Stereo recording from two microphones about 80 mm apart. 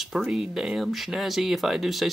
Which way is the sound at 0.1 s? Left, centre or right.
Centre.